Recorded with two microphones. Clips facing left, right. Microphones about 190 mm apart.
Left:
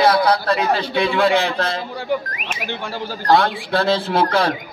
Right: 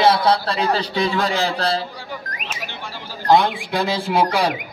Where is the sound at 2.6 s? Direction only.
55° left (ahead or behind).